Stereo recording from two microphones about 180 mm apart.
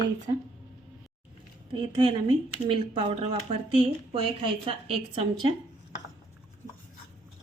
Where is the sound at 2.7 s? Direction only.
30° right (ahead or behind).